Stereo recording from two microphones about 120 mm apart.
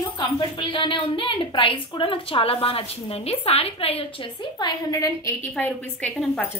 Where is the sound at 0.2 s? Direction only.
45° left (ahead or behind); by 5.3 s 30° left (ahead or behind).